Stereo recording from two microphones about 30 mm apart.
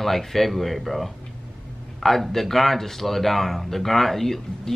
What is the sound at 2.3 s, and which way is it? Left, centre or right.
Speech, centre.